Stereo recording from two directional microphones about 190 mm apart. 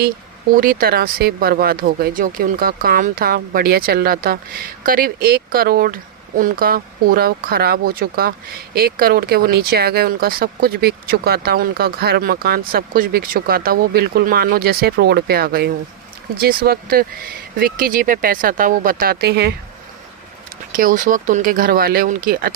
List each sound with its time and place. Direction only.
0.5 s speech: 50° right (ahead or behind)
20.7 s speech: 45° right (ahead or behind)